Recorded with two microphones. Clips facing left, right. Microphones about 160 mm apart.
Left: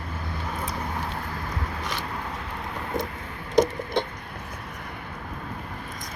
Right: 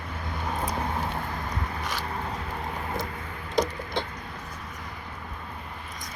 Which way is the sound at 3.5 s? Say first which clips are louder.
Left 5 dB; 20° left (ahead or behind).